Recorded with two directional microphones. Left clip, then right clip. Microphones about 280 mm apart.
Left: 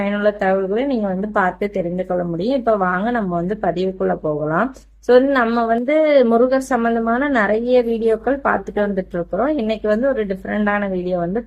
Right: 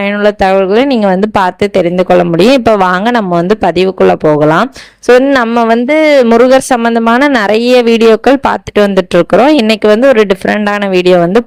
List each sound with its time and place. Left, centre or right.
0.3 s speech: right